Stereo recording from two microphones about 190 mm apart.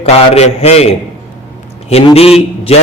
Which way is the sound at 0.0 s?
35° left (ahead or behind).